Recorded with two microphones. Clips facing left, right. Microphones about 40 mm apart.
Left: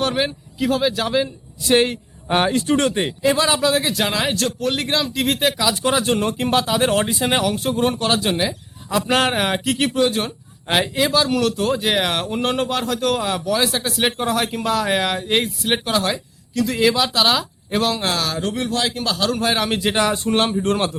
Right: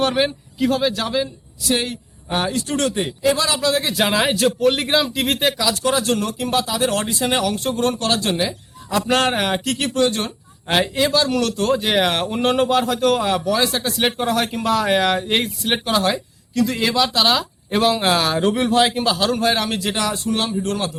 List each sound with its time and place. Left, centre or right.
0.0 s speech: centre
1.6 s speech: left
3.7 s speech: centre
3.9 s speech: centre
5.5 s speech: centre; by 6.9 s left
6.9 s speech: centre
19.7 s a man's voice: left